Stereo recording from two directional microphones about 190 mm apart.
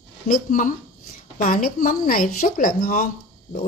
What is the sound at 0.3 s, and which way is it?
Speech, 45° left (ahead or behind).